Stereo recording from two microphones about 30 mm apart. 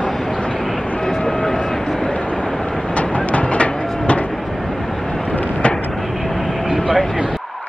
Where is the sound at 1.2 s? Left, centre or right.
Left.